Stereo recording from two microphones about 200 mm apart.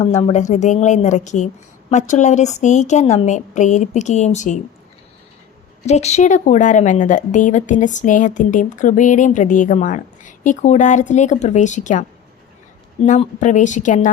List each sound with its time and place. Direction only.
0.0 s a woman's voice: 30° left (ahead or behind)
5.8 s a woman's voice: 35° left (ahead or behind)
13.1 s a woman's voice: 35° left (ahead or behind)